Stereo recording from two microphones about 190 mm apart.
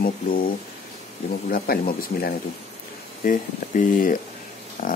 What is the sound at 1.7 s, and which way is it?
Speech, 50° left (ahead or behind).